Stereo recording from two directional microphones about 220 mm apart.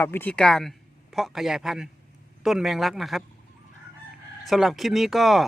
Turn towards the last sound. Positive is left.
turn(degrees=0)  # may be behind; listen again after turning